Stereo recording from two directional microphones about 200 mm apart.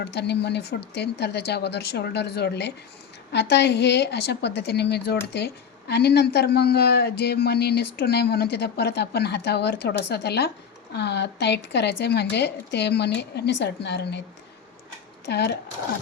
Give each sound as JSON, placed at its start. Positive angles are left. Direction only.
{"t": 0.1, "sound": "a woman's voice", "side_deg": 60}
{"t": 15.3, "sound": "a woman's voice", "side_deg": 55}